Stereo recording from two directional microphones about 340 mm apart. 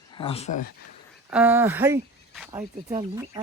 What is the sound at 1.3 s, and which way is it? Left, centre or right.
Speech, centre.